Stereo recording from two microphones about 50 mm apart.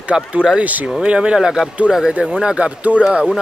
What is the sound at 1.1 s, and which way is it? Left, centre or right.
Speech, right.